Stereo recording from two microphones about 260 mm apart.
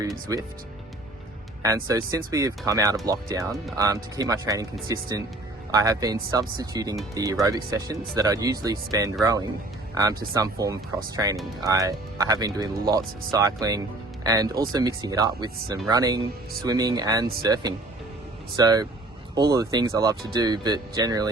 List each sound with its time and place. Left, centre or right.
1.6 s speech: centre